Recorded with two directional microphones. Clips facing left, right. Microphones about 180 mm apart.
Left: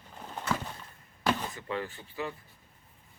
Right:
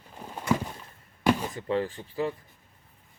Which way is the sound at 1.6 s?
35° right (ahead or behind).